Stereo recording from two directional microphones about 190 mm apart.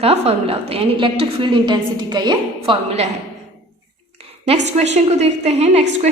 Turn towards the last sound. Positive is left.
turn(degrees=-35)  # may be behind; listen again after turning